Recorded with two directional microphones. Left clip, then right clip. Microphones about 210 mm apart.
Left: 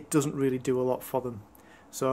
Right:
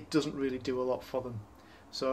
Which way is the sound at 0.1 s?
50° left (ahead or behind).